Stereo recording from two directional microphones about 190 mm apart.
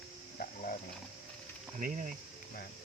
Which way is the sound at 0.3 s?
50° left (ahead or behind).